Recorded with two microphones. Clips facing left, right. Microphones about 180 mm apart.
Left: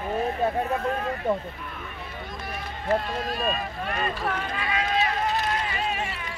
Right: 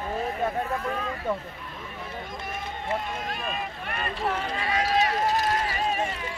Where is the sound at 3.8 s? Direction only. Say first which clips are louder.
Left 6 dB; 60° right (ahead or behind).